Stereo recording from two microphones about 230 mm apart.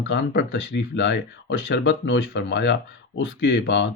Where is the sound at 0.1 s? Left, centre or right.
Left.